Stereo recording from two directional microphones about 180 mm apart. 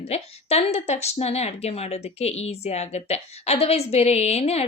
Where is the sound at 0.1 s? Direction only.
35° left (ahead or behind).